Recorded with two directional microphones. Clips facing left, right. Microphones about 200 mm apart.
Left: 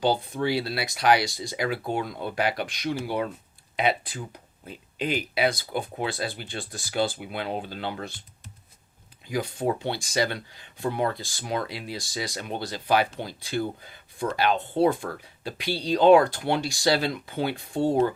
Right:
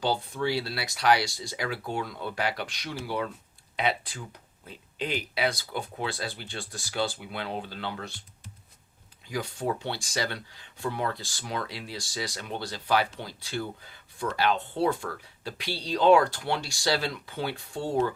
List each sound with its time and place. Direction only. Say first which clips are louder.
0.4 s speech: left 3 dB; 15° left (ahead or behind)
9.2 s speech: left 4 dB; 15° left (ahead or behind)